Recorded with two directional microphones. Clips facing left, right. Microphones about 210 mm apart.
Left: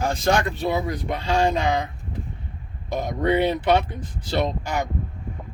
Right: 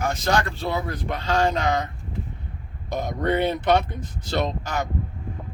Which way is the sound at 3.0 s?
10° left (ahead or behind).